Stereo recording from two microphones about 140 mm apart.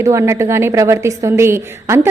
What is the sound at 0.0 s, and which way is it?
A woman's voice, 20° right (ahead or behind).